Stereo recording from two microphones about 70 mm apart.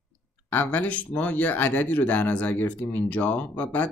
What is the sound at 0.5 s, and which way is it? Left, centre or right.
Speech, left.